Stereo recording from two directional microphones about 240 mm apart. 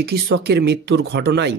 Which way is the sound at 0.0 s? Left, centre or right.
Right.